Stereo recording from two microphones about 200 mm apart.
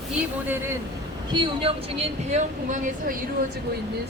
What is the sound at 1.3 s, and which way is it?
Speech, 25° right (ahead or behind).